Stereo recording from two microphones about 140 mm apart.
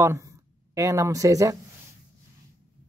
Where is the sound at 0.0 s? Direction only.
20° right (ahead or behind).